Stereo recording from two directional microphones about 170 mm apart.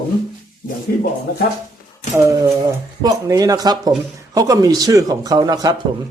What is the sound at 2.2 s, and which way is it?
A man's voice, 15° right (ahead or behind).